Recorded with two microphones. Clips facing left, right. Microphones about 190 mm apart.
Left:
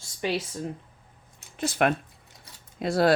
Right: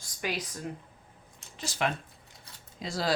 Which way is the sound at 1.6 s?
55° left (ahead or behind).